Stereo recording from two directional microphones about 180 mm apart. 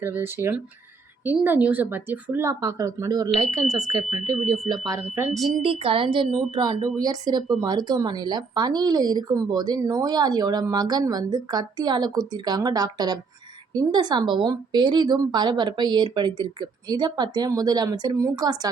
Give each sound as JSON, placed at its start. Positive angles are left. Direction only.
{"t": 0.0, "sound": "a woman's voice", "side_deg": -10}
{"t": 5.3, "sound": "speech", "side_deg": 0}
{"t": 5.6, "sound": "speech", "side_deg": -30}